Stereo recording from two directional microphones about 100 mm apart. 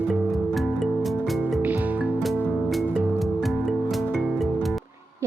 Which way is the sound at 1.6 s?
15° right (ahead or behind).